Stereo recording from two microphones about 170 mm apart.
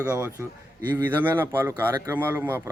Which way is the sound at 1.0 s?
10° right (ahead or behind).